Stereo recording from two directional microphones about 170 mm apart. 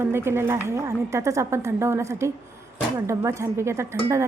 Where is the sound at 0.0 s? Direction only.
15° right (ahead or behind).